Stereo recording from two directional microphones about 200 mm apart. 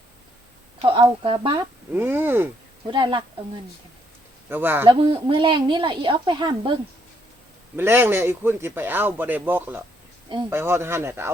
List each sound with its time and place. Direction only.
0.8 s a woman's voice: 25° right (ahead or behind)
1.9 s a man's voice: 10° right (ahead or behind)
2.8 s a woman's voice: 25° right (ahead or behind)
4.4 s speech: 10° right (ahead or behind)
4.9 s a woman's voice: 25° right (ahead or behind)
7.8 s a man's voice: 10° right (ahead or behind)